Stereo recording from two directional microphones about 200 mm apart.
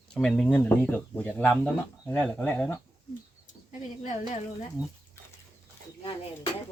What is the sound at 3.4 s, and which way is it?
Bird, 40° left (ahead or behind).